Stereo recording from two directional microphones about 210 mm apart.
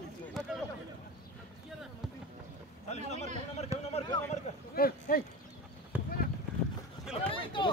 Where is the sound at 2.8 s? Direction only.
30° left (ahead or behind).